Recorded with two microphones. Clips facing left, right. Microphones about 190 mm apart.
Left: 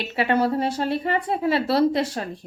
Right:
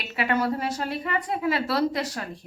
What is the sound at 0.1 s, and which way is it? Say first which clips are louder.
Speech: left 3 dB; 30° left (ahead or behind).